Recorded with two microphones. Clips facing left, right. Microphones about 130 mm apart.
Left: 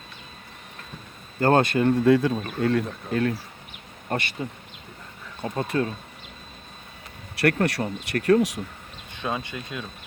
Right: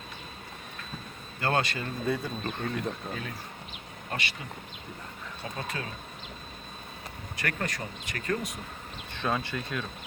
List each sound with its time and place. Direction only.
1.4 s speech: 45° left (ahead or behind); by 3.3 s 70° left (ahead or behind)
4.1 s speech: 50° left (ahead or behind)
5.4 s speech: 50° left (ahead or behind)
7.4 s speech: 70° left (ahead or behind)
9.1 s speech: 15° left (ahead or behind)